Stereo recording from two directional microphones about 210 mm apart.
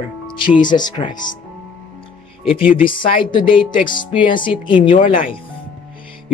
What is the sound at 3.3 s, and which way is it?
Speech, 25° left (ahead or behind).